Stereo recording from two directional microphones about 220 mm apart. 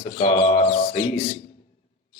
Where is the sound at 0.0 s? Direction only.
30° left (ahead or behind).